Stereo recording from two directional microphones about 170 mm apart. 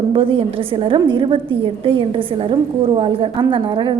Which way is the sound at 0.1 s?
30° right (ahead or behind).